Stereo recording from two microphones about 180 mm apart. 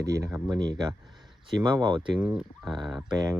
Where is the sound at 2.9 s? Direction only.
20° right (ahead or behind).